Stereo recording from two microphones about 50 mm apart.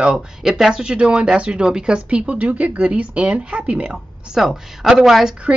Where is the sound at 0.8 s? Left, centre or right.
Right.